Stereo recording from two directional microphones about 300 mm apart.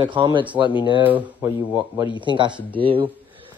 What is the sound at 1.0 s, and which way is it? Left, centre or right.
Speech, centre.